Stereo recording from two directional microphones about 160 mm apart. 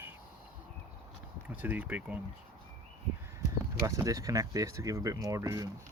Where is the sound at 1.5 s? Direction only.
10° right (ahead or behind).